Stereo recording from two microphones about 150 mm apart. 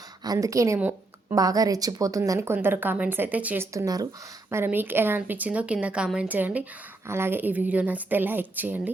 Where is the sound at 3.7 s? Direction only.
25° right (ahead or behind).